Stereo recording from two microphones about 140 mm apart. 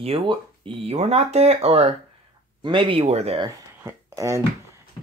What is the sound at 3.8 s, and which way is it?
Speech, 15° right (ahead or behind).